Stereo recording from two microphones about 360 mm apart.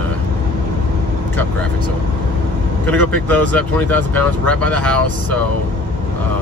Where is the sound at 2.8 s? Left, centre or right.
Centre.